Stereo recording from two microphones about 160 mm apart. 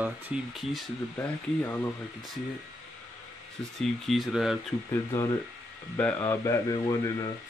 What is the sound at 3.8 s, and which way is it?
Speech, centre (ahead or behind).